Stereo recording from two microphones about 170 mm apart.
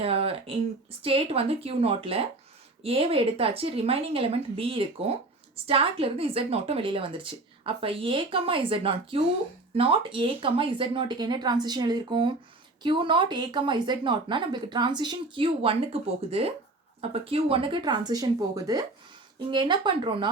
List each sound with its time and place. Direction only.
0.0 s a woman's voice: 35° right (ahead or behind)